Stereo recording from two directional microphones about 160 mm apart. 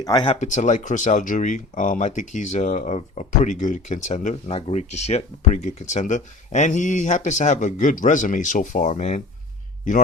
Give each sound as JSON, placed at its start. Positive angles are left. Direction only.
{"t": 0.0, "sound": "speech", "side_deg": 25}
{"t": 0.3, "sound": "speech", "side_deg": 50}